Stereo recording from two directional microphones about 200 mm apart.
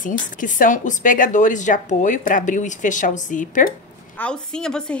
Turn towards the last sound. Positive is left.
turn(degrees=5)  # may be behind; listen again after turning